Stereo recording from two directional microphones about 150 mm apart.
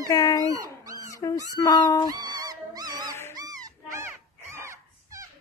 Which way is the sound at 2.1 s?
25° right (ahead or behind).